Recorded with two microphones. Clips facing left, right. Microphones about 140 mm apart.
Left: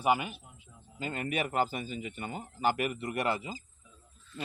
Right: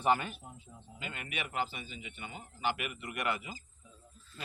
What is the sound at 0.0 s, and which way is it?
Speech, 10° left (ahead or behind).